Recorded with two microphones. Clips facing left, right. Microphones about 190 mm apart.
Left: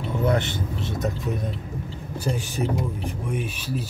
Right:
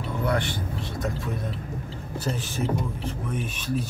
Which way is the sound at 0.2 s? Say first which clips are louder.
Left 3 dB; 20° left (ahead or behind).